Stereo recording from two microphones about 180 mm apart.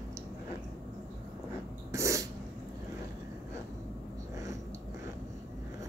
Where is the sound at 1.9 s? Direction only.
15° right (ahead or behind).